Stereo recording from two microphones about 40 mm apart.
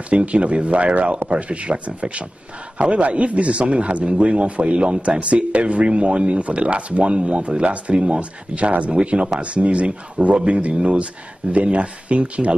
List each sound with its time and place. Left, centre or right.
0.1 s speech: right